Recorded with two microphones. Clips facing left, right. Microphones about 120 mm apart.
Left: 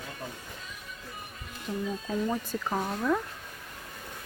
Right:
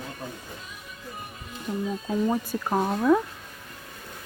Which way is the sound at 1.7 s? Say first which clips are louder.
Right 3 dB; 15° right (ahead or behind).